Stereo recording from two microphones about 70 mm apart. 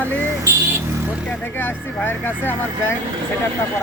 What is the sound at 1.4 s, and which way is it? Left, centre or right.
Speech, left.